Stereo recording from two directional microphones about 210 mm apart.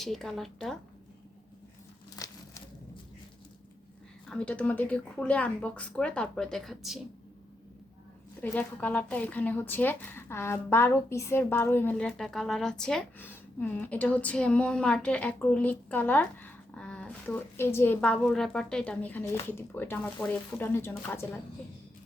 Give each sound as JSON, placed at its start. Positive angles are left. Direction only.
{"t": 0.0, "sound": "speech", "side_deg": 0}
{"t": 2.1, "sound": "a sound", "side_deg": 15}
{"t": 4.3, "sound": "speech", "side_deg": 5}
{"t": 8.4, "sound": "speech", "side_deg": 5}